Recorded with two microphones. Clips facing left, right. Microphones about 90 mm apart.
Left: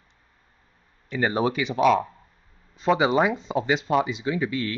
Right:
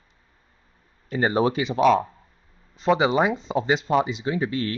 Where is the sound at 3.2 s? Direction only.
30° right (ahead or behind).